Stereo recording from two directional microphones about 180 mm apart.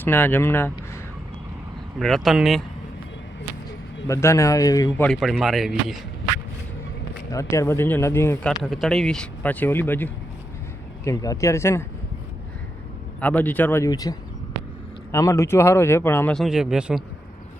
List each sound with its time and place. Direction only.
0.0 s speech: 10° left (ahead or behind)
2.0 s speech: centre (ahead or behind)
4.0 s speech: 15° left (ahead or behind)
5.0 s speech: centre (ahead or behind)
7.3 s speech: 15° left (ahead or behind)
8.6 s speech: centre (ahead or behind)
13.1 s speech: 10° left (ahead or behind)